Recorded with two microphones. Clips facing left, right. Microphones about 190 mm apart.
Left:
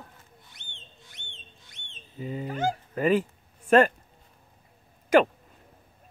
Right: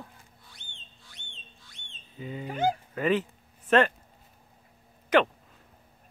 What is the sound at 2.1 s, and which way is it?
Speech, 40° left (ahead or behind).